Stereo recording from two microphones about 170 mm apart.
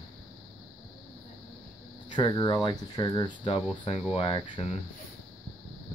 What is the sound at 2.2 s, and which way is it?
Speech, 25° left (ahead or behind).